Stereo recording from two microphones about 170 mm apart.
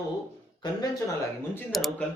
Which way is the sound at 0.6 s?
25° left (ahead or behind).